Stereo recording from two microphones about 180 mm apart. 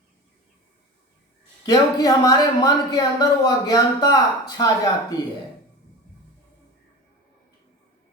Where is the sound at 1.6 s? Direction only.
20° left (ahead or behind).